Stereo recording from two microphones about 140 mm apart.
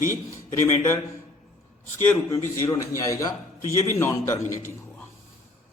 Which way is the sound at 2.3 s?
20° left (ahead or behind).